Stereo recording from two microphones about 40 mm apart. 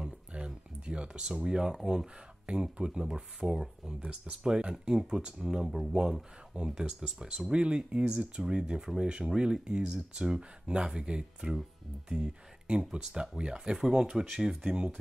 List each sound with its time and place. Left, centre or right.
0.3 s a sound: right
0.8 s speech: right
2.4 s speech: right